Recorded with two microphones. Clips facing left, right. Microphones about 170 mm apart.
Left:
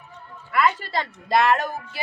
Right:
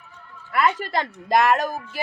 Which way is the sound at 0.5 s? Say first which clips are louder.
Even; 50° right (ahead or behind).